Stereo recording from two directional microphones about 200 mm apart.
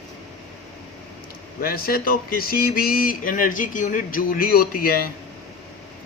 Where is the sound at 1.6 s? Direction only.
50° left (ahead or behind).